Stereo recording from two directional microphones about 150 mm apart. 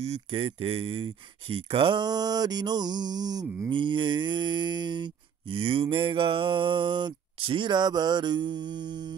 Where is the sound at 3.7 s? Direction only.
30° right (ahead or behind).